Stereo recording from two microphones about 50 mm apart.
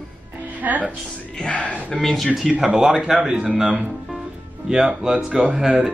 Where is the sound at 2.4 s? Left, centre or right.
Right.